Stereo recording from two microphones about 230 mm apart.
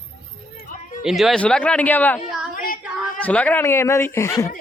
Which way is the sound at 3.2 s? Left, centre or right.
Centre.